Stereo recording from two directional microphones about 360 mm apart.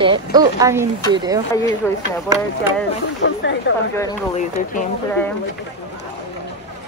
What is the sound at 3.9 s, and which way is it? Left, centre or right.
Speech, centre.